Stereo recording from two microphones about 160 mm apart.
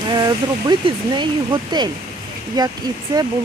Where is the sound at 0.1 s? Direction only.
25° right (ahead or behind).